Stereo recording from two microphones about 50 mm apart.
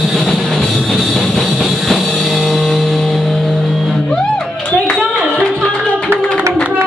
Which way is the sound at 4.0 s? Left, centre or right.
Centre.